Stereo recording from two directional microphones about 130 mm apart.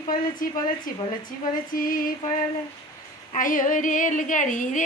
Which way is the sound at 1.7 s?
90° left.